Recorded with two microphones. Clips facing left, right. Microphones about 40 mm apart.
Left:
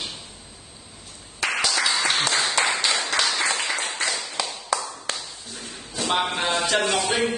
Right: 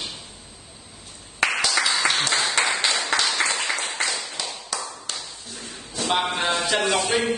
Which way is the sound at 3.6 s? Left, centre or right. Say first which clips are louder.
Even; centre.